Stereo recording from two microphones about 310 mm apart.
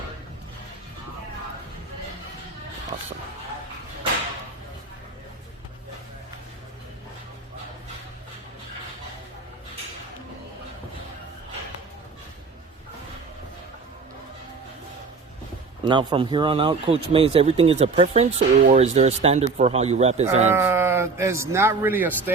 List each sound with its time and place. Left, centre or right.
15.8 s speech: centre
20.5 s a man's voice: centre